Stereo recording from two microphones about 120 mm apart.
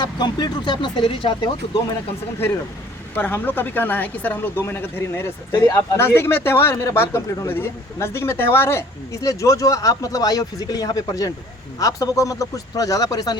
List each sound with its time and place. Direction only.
0.0 s speech: 35° left (ahead or behind)
3.2 s speech: 15° left (ahead or behind)
5.5 s speech: 35° left (ahead or behind)
5.7 s speech: 20° left (ahead or behind)